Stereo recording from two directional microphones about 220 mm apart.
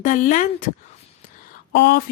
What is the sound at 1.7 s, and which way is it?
Speech, 50° left (ahead or behind).